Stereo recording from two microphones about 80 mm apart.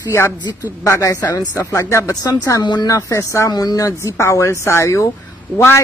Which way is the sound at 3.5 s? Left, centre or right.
Left.